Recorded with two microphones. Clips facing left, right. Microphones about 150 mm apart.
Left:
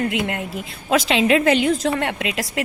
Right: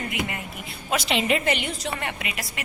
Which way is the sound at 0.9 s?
90° left.